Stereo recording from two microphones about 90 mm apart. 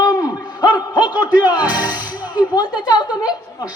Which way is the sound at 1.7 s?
20° right (ahead or behind).